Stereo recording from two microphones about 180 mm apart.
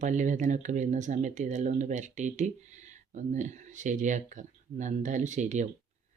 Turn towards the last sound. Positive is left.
turn(degrees=-40)  # may be behind; listen again after turning